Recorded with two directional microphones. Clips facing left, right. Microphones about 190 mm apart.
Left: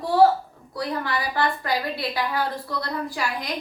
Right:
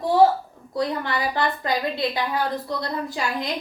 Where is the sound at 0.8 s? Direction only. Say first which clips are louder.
Right 3 dB; 20° right (ahead or behind).